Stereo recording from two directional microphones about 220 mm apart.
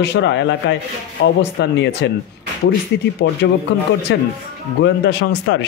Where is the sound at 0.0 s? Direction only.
55° left (ahead or behind).